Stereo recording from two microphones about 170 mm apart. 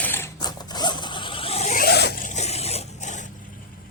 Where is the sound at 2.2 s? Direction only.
40° left (ahead or behind).